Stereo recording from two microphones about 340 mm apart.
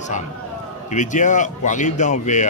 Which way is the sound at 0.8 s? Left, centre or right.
Left.